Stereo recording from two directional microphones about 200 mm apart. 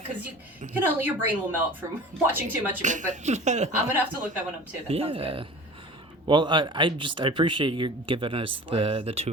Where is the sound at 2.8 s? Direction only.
40° right (ahead or behind).